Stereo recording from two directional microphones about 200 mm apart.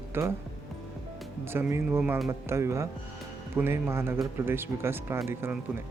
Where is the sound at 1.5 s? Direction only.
10° right (ahead or behind).